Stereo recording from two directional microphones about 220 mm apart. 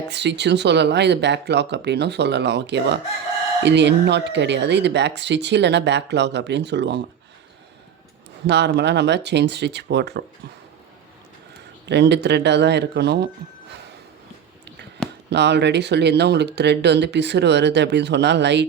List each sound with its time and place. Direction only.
0.1 s speech: 50° right (ahead or behind)
8.4 s speech: 50° right (ahead or behind)
11.9 s speech: 50° right (ahead or behind)
15.3 s speech: 50° right (ahead or behind)